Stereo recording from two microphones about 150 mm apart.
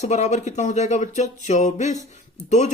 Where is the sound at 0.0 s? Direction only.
50° left (ahead or behind).